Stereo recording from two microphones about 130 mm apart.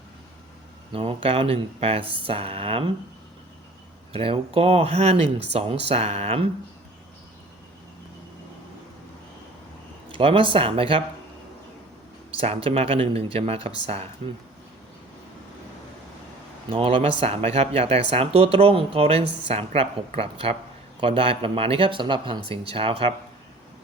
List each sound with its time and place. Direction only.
0.9 s speech: 45° right (ahead or behind)
4.1 s speech: 45° right (ahead or behind)
10.1 s speech: 45° right (ahead or behind)
12.4 s speech: 45° right (ahead or behind)
16.6 s speech: 45° right (ahead or behind)